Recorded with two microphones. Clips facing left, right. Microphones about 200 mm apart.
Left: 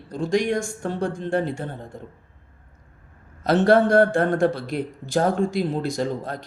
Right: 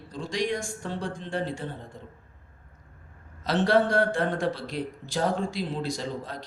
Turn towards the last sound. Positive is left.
turn(degrees=55)  # may be behind; listen again after turning